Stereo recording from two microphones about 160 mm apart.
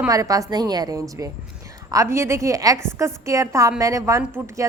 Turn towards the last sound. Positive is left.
turn(degrees=-20)  # may be behind; listen again after turning